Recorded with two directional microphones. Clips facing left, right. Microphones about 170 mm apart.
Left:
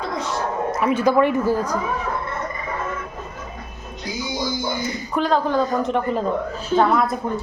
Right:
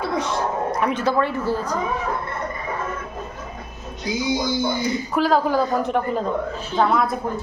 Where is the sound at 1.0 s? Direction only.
15° left (ahead or behind).